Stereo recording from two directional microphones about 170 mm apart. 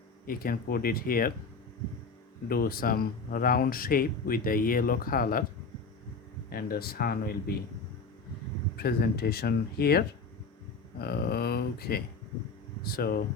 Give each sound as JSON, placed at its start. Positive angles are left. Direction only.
{"t": 0.3, "sound": "speech", "side_deg": 60}
{"t": 2.5, "sound": "speech", "side_deg": 60}
{"t": 6.5, "sound": "speech", "side_deg": 60}
{"t": 8.7, "sound": "speech", "side_deg": 70}
{"t": 11.0, "sound": "speech", "side_deg": 70}